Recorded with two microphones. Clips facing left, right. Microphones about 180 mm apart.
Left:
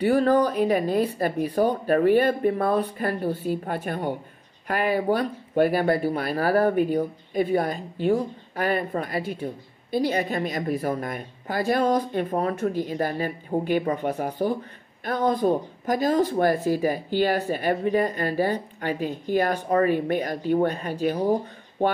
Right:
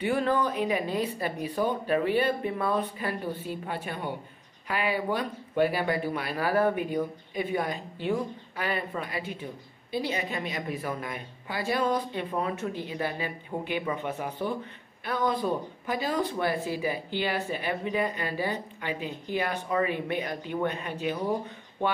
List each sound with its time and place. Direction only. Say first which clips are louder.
0.0 s speech: left 7 dB; 40° left (ahead or behind)